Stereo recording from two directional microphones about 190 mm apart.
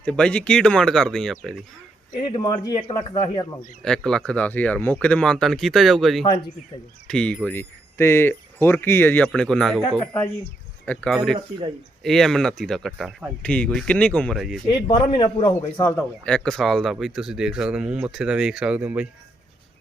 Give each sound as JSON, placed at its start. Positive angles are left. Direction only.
{"t": 0.0, "sound": "speech", "side_deg": 5}
{"t": 2.3, "sound": "a man's voice", "side_deg": 20}
{"t": 3.8, "sound": "speech", "side_deg": 5}
{"t": 10.8, "sound": "speech", "side_deg": 5}
{"t": 14.8, "sound": "a man's voice", "side_deg": 25}
{"t": 16.2, "sound": "speech", "side_deg": 5}